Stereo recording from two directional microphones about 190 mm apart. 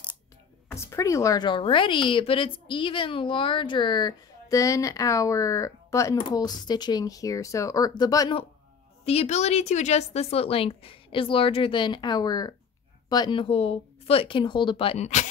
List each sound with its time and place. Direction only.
0.7 s speech: 15° left (ahead or behind)
9.0 s speech: 35° left (ahead or behind)